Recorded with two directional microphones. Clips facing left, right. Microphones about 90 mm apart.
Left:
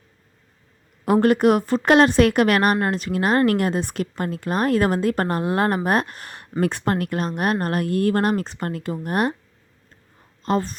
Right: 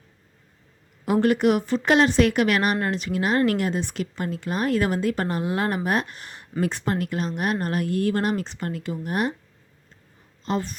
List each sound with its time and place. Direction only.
1.0 s speech: 45° left (ahead or behind)
10.4 s speech: 45° left (ahead or behind)